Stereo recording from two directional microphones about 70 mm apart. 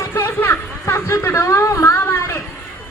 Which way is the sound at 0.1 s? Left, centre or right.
Left.